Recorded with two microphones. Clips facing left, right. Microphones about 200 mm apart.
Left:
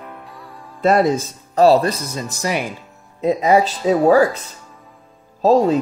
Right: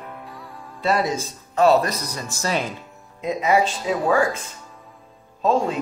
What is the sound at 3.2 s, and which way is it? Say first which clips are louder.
Speech: left 5 dB; 35° left (ahead or behind).